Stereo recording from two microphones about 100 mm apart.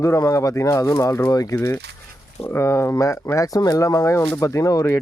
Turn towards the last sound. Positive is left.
turn(degrees=35)  # may be behind; listen again after turning